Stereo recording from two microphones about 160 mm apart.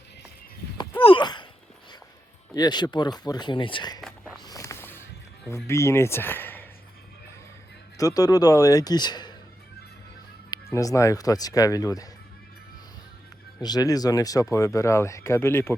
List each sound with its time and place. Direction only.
0.8 s a sound: 35° left (ahead or behind)
2.6 s speech: 25° left (ahead or behind)
4.4 s vehicle: 20° left (ahead or behind)
5.6 s speech: 15° left (ahead or behind)
7.9 s speech: 25° left (ahead or behind)
10.5 s speech: 20° left (ahead or behind)
13.6 s speech: 25° left (ahead or behind)